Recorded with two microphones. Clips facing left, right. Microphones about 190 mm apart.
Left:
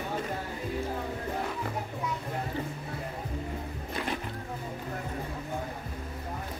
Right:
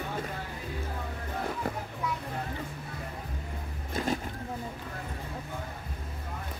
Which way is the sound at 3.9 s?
45° right (ahead or behind).